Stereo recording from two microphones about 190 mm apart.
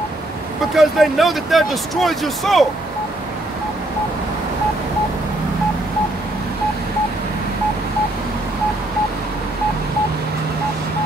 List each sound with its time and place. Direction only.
0.7 s speech: centre (ahead or behind)